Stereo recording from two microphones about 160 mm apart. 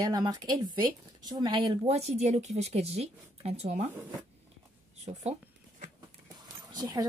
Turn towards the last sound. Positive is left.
turn(degrees=-25)  # may be behind; listen again after turning